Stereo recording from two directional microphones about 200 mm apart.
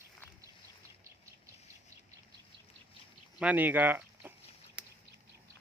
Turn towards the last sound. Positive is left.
turn(degrees=-5)  # may be behind; listen again after turning